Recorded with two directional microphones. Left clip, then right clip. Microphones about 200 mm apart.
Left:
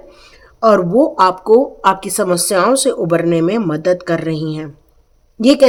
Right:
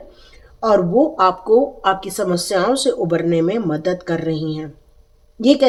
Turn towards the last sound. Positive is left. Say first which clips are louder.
# left 3 dB
turn(degrees=35)  # may be behind; listen again after turning